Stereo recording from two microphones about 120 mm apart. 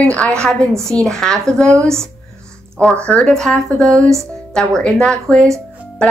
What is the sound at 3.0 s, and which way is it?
Speech, 10° left (ahead or behind).